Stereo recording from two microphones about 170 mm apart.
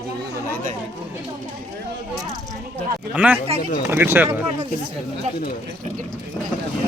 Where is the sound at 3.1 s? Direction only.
10° right (ahead or behind).